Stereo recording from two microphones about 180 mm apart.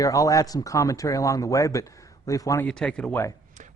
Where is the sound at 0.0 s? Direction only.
20° left (ahead or behind).